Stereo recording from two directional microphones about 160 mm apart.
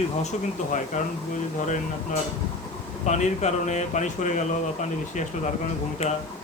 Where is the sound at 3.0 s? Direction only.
45° left (ahead or behind).